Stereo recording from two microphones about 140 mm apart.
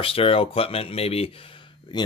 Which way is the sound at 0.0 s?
40° left (ahead or behind).